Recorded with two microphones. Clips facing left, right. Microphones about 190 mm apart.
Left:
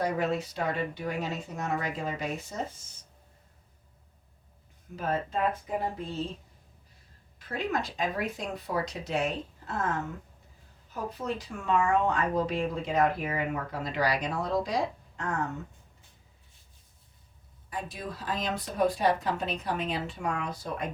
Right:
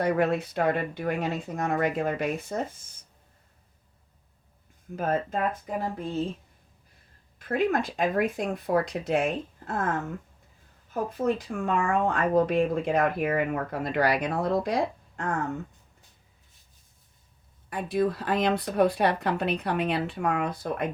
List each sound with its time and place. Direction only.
0.0 s speech: 60° right (ahead or behind)
4.9 s speech: 50° right (ahead or behind)
7.3 s speech: 55° right (ahead or behind)
10.9 s speech: 50° right (ahead or behind)
17.7 s speech: 60° right (ahead or behind)